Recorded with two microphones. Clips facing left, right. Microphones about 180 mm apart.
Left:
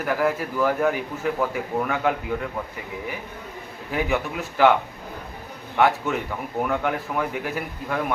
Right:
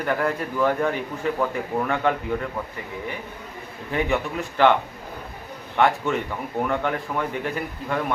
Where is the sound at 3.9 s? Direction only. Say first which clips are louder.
Right 1 dB; 5° left (ahead or behind).